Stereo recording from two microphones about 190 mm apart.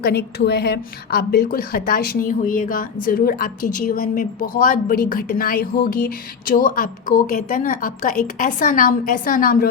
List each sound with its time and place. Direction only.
0.0 s a woman's voice: 60° left (ahead or behind)